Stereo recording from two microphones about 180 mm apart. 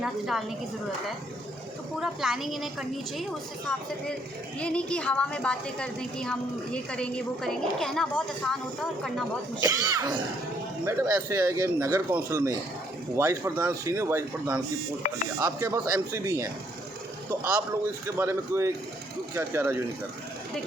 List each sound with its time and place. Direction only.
0.0 s a woman's voice: centre (ahead or behind)
2.0 s a woman's voice: centre (ahead or behind)
4.6 s a woman's voice: 5° left (ahead or behind)
9.6 s speech: 20° right (ahead or behind)
18.0 s speech: 15° right (ahead or behind)